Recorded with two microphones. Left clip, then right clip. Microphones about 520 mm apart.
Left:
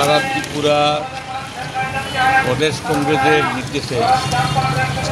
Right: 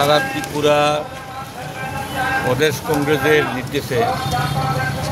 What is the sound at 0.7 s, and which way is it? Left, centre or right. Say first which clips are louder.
Speech: even; right.